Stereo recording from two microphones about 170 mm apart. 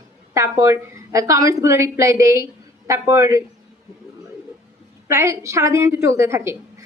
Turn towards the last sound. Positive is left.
turn(degrees=-15)  # may be behind; listen again after turning